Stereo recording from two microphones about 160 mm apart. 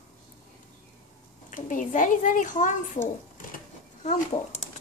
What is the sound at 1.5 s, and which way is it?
A child's voice, 55° left (ahead or behind).